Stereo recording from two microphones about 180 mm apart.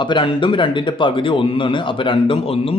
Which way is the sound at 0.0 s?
25° left (ahead or behind).